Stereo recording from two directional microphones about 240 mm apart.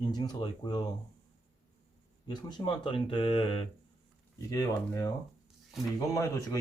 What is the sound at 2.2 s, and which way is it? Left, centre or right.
Speech, centre.